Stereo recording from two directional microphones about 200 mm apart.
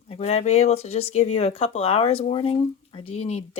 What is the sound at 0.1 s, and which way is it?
Speech, 30° left (ahead or behind).